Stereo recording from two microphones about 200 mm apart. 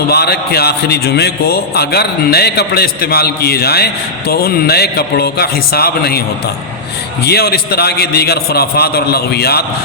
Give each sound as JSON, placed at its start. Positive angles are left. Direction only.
{"t": 0.1, "sound": "a man's voice", "side_deg": 55}
{"t": 7.3, "sound": "a man's voice", "side_deg": 50}